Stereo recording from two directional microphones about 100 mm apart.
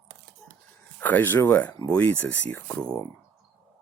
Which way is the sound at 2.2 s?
25° left (ahead or behind).